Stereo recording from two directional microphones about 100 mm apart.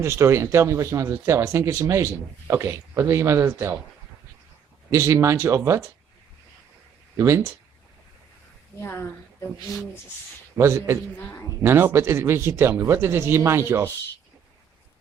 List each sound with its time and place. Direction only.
0.0 s speech: 25° right (ahead or behind)
4.9 s speech: 30° right (ahead or behind)
7.2 s speech: 30° right (ahead or behind)
8.8 s a woman's voice: 25° left (ahead or behind)
10.6 s speech: 25° right (ahead or behind)
11.2 s a woman's voice: 20° left (ahead or behind)
11.6 s speech: 25° right (ahead or behind)